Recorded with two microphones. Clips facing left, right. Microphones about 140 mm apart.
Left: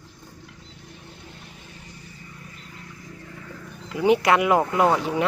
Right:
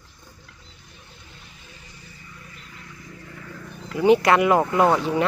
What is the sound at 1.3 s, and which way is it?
Vehicle, 60° left (ahead or behind).